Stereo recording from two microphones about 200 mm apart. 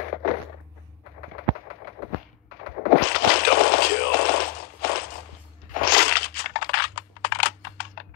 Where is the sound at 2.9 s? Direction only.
50° left (ahead or behind).